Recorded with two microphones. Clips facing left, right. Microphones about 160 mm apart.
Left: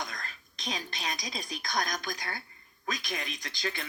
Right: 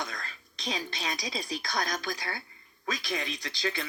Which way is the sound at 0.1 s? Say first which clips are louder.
Right 1 dB; 30° right (ahead or behind).